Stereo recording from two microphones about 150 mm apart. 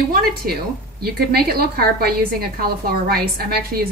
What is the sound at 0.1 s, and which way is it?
A woman's voice, 85° right.